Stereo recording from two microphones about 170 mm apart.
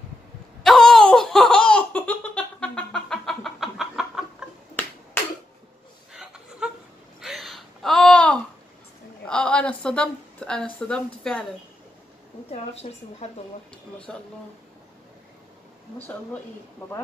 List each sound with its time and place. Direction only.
0.7 s laughter: centre (ahead or behind)
6.1 s chuckle: 5° right (ahead or behind)
7.2 s a sound: centre (ahead or behind)
9.2 s a woman's voice: 5° left (ahead or behind)
12.8 s speech: 40° left (ahead or behind)
14.1 s speech: 5° left (ahead or behind)